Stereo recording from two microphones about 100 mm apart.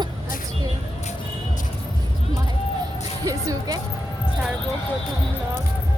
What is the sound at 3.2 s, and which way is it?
Music, 35° right (ahead or behind).